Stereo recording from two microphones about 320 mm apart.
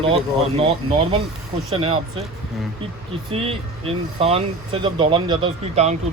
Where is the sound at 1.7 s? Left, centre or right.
Centre.